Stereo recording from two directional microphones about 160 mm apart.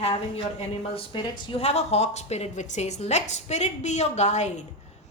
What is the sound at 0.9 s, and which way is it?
Speech, 35° left (ahead or behind).